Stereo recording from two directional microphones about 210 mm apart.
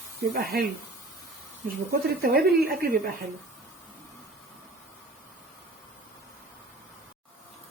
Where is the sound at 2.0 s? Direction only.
45° right (ahead or behind).